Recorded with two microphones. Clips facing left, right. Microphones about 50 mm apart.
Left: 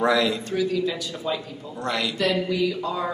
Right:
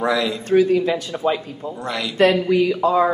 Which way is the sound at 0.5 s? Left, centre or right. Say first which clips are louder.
Right 8 dB; right.